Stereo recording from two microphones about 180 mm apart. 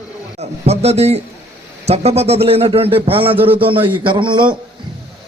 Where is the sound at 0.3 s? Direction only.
35° right (ahead or behind).